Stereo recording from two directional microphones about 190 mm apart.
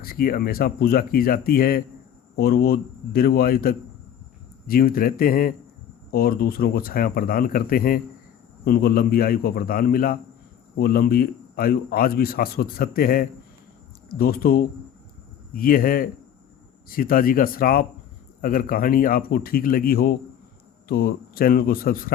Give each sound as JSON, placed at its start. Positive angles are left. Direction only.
{"t": 0.0, "sound": "speech", "side_deg": 50}